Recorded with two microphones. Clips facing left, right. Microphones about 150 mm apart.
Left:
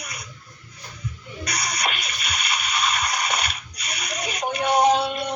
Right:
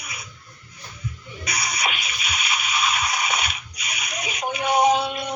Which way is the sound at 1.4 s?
10° right (ahead or behind).